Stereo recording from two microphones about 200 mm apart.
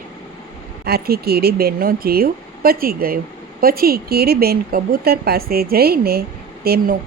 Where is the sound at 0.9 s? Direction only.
50° right (ahead or behind).